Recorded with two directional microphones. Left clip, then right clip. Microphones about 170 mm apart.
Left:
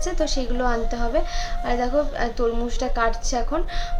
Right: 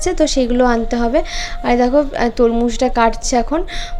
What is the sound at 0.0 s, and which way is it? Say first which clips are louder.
A man's voice: right 10 dB; 40° right (ahead or behind).